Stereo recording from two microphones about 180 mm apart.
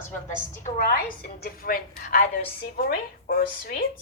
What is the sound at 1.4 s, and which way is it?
A woman's voice, 55° left (ahead or behind).